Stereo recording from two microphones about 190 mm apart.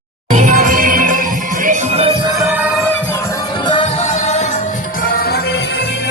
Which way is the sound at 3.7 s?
25° left (ahead or behind).